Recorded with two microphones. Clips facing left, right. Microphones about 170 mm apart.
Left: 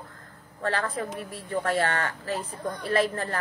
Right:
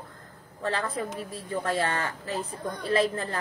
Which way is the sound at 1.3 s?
25° right (ahead or behind).